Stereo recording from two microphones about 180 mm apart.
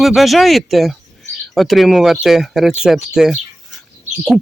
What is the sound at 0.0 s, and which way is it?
Speech, centre (ahead or behind).